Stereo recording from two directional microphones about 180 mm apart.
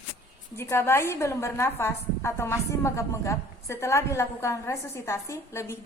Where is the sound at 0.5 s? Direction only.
15° left (ahead or behind).